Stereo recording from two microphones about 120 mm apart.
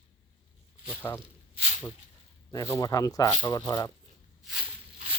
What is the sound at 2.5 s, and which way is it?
Speech, 30° left (ahead or behind).